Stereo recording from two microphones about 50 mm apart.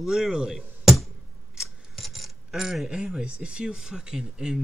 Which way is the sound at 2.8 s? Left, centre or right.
Centre.